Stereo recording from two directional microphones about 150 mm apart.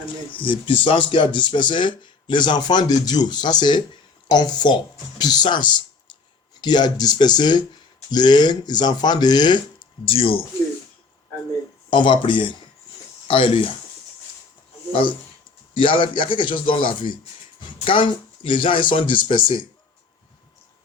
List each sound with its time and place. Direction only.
0.3 s speech: 35° left (ahead or behind)
10.1 s speech: 40° left (ahead or behind)
11.9 s speech: 30° left (ahead or behind)
15.8 s speech: 35° left (ahead or behind)